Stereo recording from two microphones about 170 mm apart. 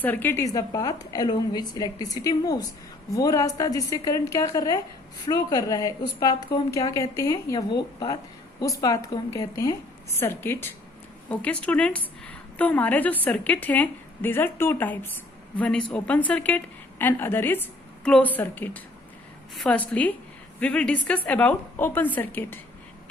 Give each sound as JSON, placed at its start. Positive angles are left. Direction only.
{"t": 0.0, "sound": "a woman's voice", "side_deg": 10}